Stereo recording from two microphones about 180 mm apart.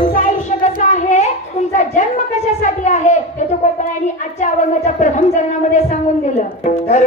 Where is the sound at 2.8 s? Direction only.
40° left (ahead or behind).